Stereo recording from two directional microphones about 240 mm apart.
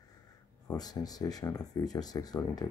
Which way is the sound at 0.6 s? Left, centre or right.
Centre.